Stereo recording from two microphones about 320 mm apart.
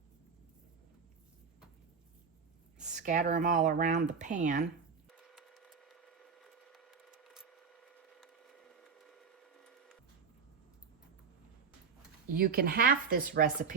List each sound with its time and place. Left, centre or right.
2.7 s speech: right
5.1 s a sound: centre
12.3 s speech: right